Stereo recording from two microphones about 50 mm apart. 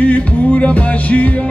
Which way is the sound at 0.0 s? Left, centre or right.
Left.